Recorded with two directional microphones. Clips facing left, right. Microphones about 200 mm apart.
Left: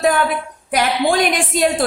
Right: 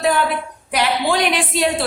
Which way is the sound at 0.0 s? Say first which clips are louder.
Left 2 dB; 50° left (ahead or behind).